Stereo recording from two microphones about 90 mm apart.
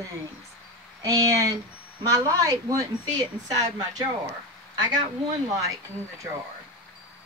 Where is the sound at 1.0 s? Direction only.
40° right (ahead or behind).